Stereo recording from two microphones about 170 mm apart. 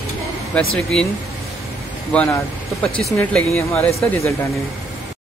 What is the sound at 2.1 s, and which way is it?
Speech, 5° left (ahead or behind).